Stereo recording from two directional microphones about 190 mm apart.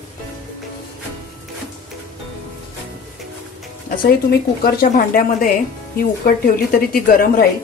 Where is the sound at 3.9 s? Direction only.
50° left (ahead or behind).